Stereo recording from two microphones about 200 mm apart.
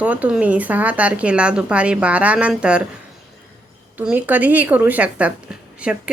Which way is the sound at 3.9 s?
10° right (ahead or behind).